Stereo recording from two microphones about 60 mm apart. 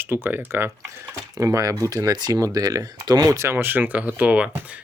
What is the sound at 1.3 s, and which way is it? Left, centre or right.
Speech, right.